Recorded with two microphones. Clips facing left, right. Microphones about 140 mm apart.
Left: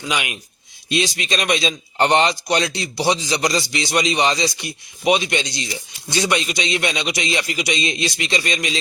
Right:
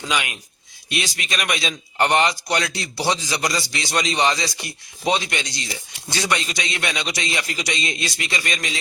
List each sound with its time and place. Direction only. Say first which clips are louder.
0.1 s speech: left 1 dB; 20° left (ahead or behind)